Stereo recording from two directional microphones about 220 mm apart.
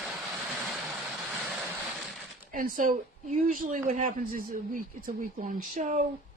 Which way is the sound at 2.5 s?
40° right (ahead or behind).